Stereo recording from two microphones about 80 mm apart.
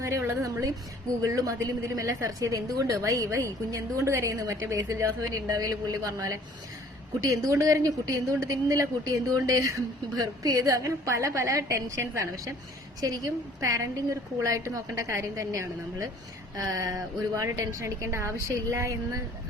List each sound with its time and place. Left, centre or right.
0.0 s a woman's voice: right